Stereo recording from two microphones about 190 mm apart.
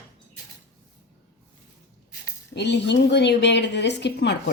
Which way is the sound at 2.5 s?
65° left (ahead or behind).